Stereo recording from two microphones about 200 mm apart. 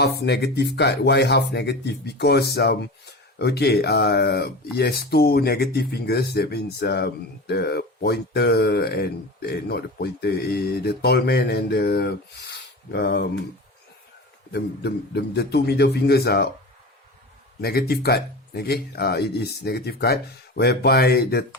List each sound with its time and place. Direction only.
0.0 s speech: 55° left (ahead or behind)
14.5 s speech: 55° left (ahead or behind)
17.6 s speech: 50° left (ahead or behind)